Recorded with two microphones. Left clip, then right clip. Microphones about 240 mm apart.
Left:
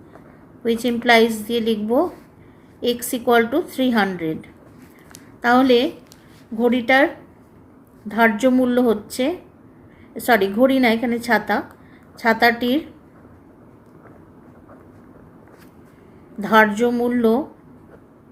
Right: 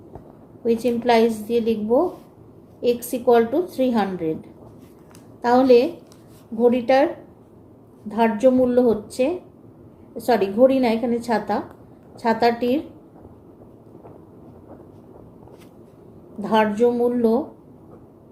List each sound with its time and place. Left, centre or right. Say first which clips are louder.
0.6 s a woman's voice: even; left
5.4 s a woman's voice: even; left
16.4 s a woman's voice: left 3 dB; left